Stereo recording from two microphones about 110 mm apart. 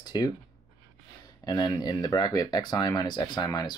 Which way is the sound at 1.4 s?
35° left (ahead or behind).